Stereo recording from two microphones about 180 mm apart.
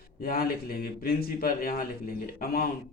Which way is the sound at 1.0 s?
55° left (ahead or behind).